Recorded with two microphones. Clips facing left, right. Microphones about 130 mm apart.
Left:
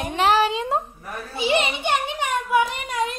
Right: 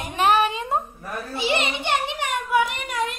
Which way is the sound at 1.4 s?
15° left (ahead or behind).